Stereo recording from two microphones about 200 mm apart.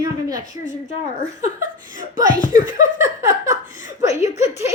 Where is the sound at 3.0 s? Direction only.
15° right (ahead or behind).